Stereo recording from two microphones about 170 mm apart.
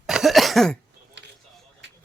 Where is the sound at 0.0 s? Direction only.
Centre (ahead or behind).